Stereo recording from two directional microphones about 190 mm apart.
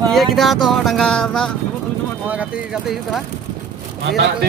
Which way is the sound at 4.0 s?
65° right (ahead or behind).